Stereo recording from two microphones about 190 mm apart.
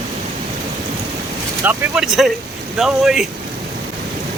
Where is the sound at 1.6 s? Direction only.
5° right (ahead or behind).